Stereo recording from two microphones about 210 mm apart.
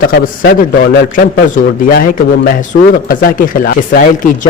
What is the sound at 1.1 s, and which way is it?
A man's voice, 40° left (ahead or behind).